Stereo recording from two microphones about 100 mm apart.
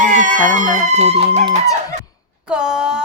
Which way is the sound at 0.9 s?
90° right.